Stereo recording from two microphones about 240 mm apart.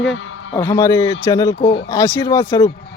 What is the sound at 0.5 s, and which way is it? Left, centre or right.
A man's voice, centre.